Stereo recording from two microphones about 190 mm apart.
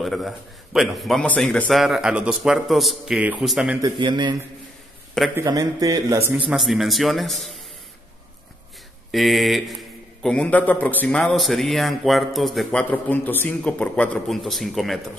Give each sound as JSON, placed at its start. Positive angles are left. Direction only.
{"t": 0.0, "sound": "a man's voice", "side_deg": 0}
{"t": 3.8, "sound": "a man's voice", "side_deg": -25}
{"t": 6.5, "sound": "a man's voice", "side_deg": 0}
{"t": 9.1, "sound": "a man's voice", "side_deg": 0}